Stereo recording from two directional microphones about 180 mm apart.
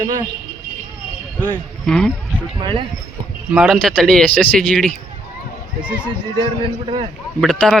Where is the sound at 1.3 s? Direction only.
10° left (ahead or behind).